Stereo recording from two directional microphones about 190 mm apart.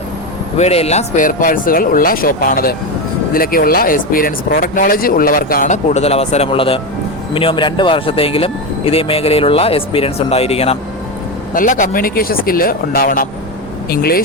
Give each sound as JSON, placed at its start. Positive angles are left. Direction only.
{"t": 0.5, "sound": "speech", "side_deg": 35}
{"t": 11.5, "sound": "speech", "side_deg": 45}